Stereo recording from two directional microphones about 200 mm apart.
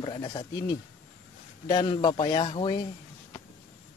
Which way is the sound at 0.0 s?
25° left (ahead or behind).